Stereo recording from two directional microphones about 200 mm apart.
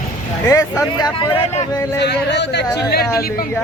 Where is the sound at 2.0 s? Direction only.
60° left (ahead or behind).